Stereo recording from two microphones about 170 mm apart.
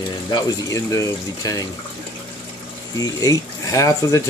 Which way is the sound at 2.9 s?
20° left (ahead or behind).